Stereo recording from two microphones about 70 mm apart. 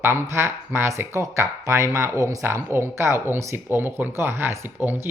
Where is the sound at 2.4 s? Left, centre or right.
Right.